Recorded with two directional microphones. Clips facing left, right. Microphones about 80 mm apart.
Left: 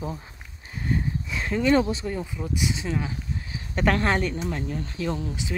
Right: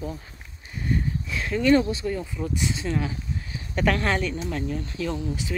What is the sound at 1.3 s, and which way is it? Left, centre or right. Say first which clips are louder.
Speech: right 1 dB; left.